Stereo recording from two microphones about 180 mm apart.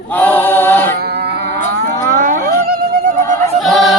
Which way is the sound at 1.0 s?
65° right (ahead or behind).